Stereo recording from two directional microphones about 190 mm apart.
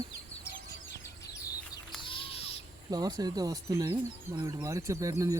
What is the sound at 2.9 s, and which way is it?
Speech, 20° right (ahead or behind).